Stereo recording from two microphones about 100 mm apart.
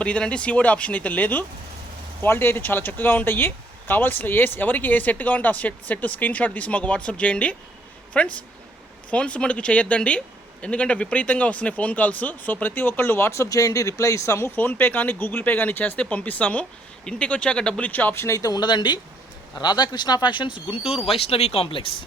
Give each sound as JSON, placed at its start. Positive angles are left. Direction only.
{"t": 0.0, "sound": "speech", "side_deg": 10}
{"t": 14.5, "sound": "speech", "side_deg": 20}
{"t": 20.7, "sound": "speech", "side_deg": 75}